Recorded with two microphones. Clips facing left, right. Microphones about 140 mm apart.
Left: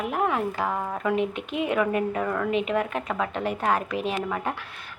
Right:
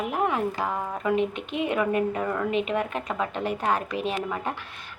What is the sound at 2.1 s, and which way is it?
A woman's voice, 15° right (ahead or behind).